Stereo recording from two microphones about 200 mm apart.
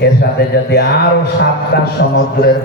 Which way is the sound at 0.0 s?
50° left (ahead or behind).